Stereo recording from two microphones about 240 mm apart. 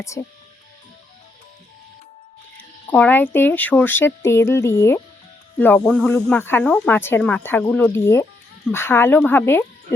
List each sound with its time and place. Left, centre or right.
0.1 s speech: centre
2.8 s speech: centre